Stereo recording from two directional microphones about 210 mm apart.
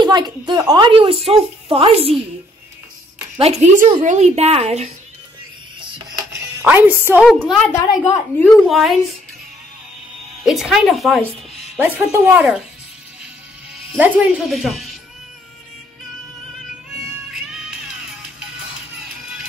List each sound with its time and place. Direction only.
0.0 s speech: 20° right (ahead or behind)
3.3 s a woman's voice: 30° right (ahead or behind)
6.3 s music: 10° right (ahead or behind)
7.4 s a woman's voice: 5° left (ahead or behind)
8.6 s speech: centre (ahead or behind)
10.4 s speech: centre (ahead or behind)
13.7 s speech: 5° right (ahead or behind)
17.3 s music: centre (ahead or behind)